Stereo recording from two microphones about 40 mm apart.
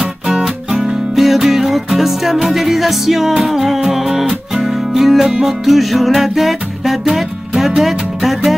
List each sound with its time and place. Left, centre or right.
0.3 s music: centre